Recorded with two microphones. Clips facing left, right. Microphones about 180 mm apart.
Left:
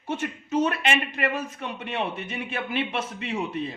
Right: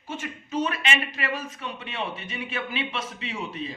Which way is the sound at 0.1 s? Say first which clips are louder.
Left 5 dB; 65° left (ahead or behind).